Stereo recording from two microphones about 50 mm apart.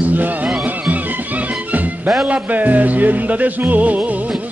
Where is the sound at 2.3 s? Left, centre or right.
Right.